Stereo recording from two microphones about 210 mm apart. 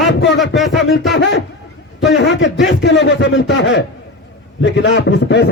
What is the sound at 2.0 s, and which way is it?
A man's voice, 60° left (ahead or behind).